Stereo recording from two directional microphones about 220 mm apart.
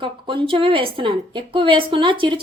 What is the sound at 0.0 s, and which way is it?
Speech, 25° right (ahead or behind).